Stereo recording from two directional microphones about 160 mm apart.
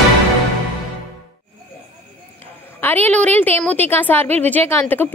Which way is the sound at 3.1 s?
10° left (ahead or behind).